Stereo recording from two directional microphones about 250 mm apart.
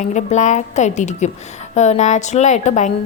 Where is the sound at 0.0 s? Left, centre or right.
Left.